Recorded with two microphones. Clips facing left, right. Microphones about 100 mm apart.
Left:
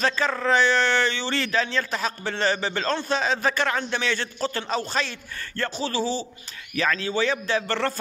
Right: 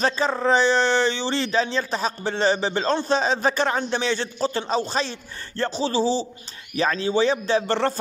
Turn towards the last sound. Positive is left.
turn(degrees=-20)  # may be behind; listen again after turning